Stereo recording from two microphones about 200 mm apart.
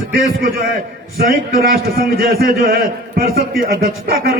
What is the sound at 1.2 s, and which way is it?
A man's voice, 45° right (ahead or behind).